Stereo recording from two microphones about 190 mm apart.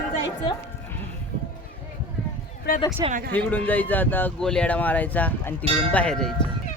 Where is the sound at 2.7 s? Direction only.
50° left (ahead or behind).